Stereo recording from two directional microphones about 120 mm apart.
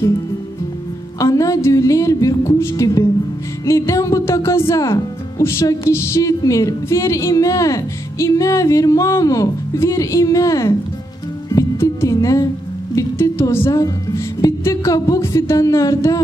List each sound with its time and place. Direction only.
1.2 s speech: 30° left (ahead or behind)
11.4 s music: 25° left (ahead or behind)
12.9 s speech: 20° left (ahead or behind)